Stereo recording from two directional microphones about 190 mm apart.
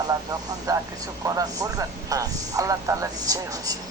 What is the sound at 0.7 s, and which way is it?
Speech, 15° right (ahead or behind).